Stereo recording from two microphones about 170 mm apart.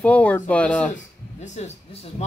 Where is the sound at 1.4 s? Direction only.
40° left (ahead or behind).